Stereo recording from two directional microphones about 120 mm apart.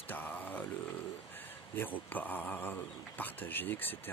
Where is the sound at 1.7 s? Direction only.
15° left (ahead or behind).